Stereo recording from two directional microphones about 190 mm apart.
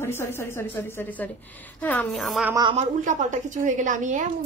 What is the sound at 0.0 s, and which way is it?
A woman's voice, 15° left (ahead or behind).